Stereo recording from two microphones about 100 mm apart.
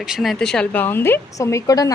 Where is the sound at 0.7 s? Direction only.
20° left (ahead or behind).